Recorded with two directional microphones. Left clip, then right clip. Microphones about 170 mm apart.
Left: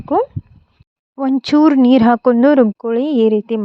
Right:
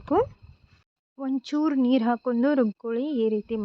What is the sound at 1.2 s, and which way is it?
A woman's voice, 50° left (ahead or behind).